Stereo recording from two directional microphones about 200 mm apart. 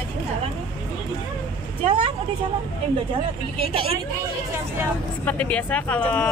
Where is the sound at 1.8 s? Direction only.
35° right (ahead or behind).